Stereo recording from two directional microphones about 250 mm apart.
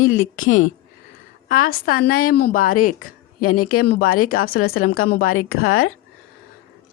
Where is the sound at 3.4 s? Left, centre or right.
Left.